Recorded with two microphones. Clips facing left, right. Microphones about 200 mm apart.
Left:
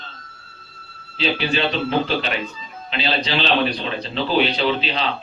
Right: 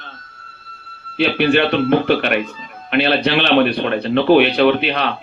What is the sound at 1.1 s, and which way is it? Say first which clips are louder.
Speech: right 7 dB; 60° right (ahead or behind).